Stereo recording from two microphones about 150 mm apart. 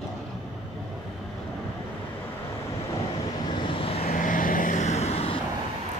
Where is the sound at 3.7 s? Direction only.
40° left (ahead or behind).